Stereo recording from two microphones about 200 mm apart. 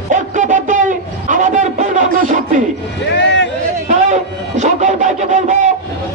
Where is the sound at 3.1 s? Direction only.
65° left (ahead or behind).